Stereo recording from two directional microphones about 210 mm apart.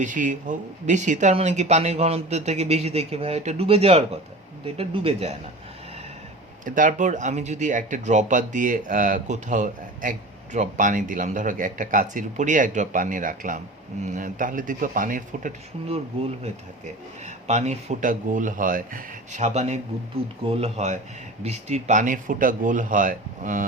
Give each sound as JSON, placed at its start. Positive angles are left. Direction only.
{"t": 0.0, "sound": "speech", "side_deg": -40}
{"t": 6.7, "sound": "speech", "side_deg": -40}
{"t": 17.2, "sound": "speech", "side_deg": -35}